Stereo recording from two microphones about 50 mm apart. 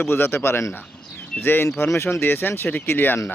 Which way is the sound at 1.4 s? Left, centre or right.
Left.